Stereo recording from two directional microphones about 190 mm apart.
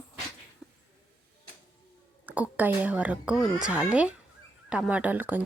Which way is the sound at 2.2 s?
10° right (ahead or behind).